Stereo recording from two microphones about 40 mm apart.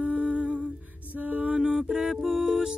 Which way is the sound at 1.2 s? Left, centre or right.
Right.